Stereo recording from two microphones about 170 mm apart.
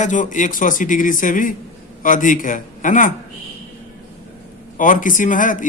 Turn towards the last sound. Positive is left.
turn(degrees=50)  # may be behind; listen again after turning